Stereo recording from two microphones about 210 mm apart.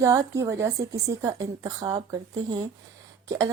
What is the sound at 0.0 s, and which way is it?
A woman's voice, 15° right (ahead or behind).